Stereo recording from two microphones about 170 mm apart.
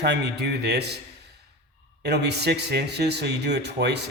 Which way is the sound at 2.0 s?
80° right.